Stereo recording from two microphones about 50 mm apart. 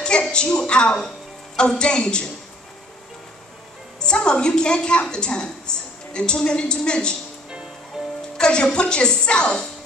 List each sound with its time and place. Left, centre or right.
0.0 s a woman's voice: centre
4.0 s a woman's voice: centre
8.4 s a woman's voice: centre